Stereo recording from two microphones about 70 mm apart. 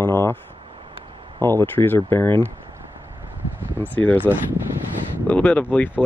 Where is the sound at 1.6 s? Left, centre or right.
Left.